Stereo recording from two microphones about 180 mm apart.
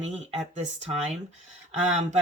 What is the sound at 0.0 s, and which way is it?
Speech, 40° right (ahead or behind).